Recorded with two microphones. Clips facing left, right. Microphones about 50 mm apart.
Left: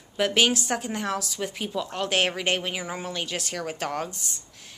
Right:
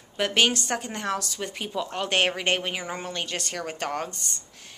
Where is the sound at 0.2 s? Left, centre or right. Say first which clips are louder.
Left 1 dB; centre.